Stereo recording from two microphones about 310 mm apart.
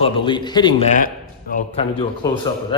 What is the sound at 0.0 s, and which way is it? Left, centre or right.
A man's voice, centre.